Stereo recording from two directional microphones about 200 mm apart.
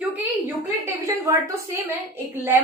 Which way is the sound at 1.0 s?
15° right (ahead or behind).